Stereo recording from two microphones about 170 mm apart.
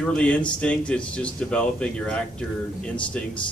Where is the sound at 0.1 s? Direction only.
5° left (ahead or behind).